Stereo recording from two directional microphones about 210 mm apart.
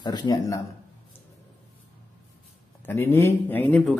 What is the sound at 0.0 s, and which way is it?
Speech, 20° left (ahead or behind).